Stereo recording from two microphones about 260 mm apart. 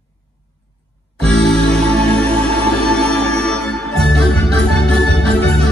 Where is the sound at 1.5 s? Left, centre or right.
Centre.